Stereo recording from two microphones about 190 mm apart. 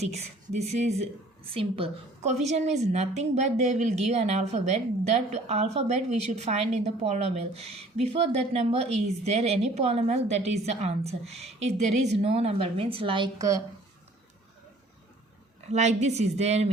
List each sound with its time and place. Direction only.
0.5 s a woman's voice: 35° right (ahead or behind); by 13.6 s 20° right (ahead or behind)
15.7 s a woman's voice: 35° right (ahead or behind)